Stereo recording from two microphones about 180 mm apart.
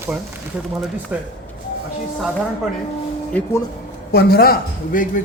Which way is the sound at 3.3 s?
10° left (ahead or behind).